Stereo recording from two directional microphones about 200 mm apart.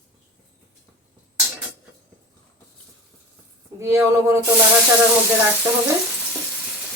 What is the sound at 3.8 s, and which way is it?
Speech, 15° right (ahead or behind).